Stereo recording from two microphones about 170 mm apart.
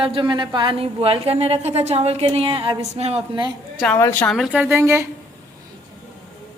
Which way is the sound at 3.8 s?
5° left (ahead or behind).